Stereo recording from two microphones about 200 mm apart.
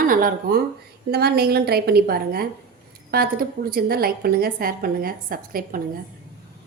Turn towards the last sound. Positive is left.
turn(degrees=-45)  # may be behind; listen again after turning